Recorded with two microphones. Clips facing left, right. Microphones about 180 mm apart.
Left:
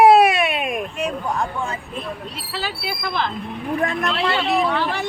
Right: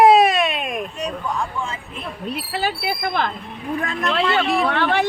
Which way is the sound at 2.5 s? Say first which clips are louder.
Right 3 dB; 55° right (ahead or behind).